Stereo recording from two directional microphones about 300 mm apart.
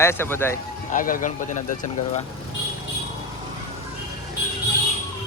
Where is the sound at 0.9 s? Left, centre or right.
Left.